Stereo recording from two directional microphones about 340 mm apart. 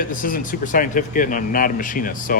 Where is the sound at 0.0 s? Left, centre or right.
Left.